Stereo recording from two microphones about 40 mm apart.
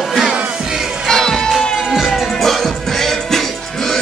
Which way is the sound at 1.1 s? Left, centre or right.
Centre.